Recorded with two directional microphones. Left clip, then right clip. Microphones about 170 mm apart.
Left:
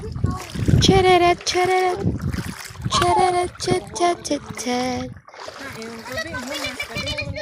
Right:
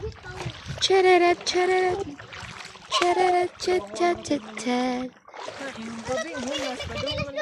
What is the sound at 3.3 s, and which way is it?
Speech, 5° left (ahead or behind).